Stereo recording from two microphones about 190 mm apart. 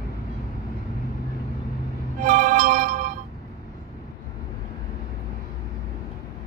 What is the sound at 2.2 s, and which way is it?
Music, 45° right (ahead or behind).